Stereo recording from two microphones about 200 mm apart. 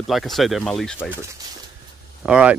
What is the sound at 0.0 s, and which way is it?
Speech, centre (ahead or behind).